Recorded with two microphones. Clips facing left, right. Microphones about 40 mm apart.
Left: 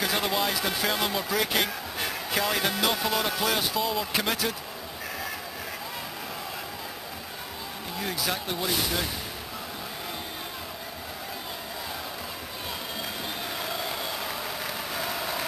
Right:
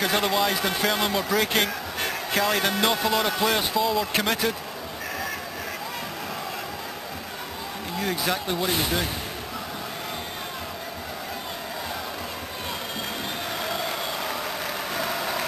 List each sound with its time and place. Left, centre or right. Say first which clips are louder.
0.0 s a man's voice: right 4 dB; centre
0.6 s a man's voice: right 3 dB; centre
3.8 s a man's voice: right 4 dB; centre
8.1 s a man's voice: right 4 dB; centre
13.6 s a sound: right 4 dB; centre
15.0 s vehicle: right 3 dB; centre